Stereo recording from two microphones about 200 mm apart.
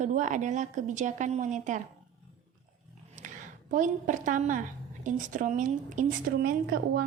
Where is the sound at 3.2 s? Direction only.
40° right (ahead or behind).